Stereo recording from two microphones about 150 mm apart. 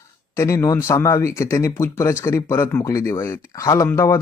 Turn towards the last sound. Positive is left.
turn(degrees=20)  # may be behind; listen again after turning